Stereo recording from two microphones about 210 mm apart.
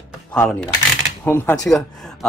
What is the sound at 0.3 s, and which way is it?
Speech, 5° left (ahead or behind).